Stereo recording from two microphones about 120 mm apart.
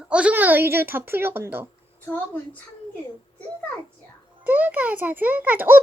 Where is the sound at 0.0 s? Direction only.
10° right (ahead or behind).